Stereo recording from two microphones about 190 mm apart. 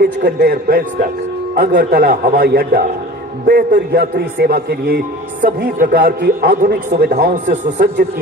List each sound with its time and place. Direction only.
0.0 s a man's voice: 55° right (ahead or behind)
7.5 s speech: 40° right (ahead or behind)